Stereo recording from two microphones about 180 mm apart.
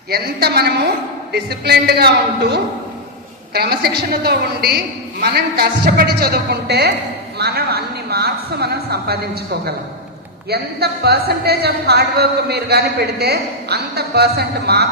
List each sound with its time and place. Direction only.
0.1 s a woman's voice: 60° right (ahead or behind)